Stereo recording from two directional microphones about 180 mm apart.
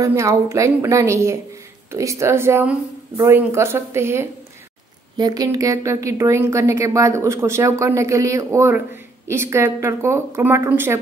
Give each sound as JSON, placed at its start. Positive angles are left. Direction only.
{"t": 0.0, "sound": "a woman's voice", "side_deg": -15}